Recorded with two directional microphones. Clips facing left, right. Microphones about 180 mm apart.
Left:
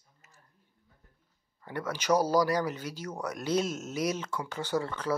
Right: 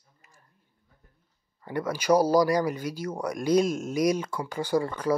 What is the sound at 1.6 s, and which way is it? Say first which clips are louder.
Speech: right 5 dB; 10° right (ahead or behind).